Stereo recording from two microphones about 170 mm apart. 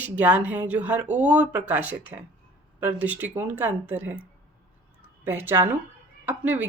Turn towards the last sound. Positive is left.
turn(degrees=-10)  # may be behind; listen again after turning